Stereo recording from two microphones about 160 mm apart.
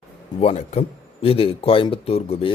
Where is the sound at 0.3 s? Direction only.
40° left (ahead or behind).